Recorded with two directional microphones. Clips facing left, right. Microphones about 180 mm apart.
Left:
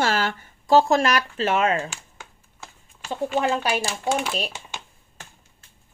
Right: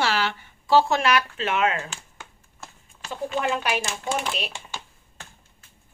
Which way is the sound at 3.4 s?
35° left (ahead or behind).